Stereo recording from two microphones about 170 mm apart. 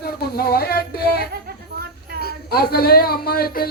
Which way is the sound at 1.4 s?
65° right (ahead or behind).